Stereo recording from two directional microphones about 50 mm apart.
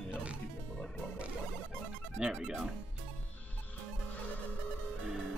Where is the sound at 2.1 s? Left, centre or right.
Centre.